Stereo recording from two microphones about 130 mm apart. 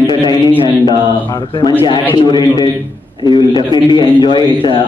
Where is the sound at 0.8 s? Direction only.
30° left (ahead or behind).